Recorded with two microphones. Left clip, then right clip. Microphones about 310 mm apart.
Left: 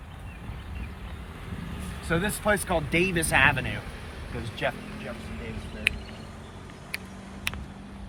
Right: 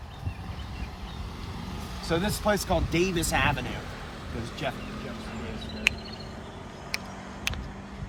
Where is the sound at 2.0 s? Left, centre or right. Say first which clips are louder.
Left 1 dB; centre.